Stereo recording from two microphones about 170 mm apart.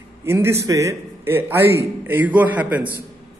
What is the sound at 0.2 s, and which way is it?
A man's voice, 15° right (ahead or behind).